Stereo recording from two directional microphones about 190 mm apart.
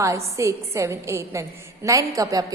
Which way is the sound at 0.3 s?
15° right (ahead or behind).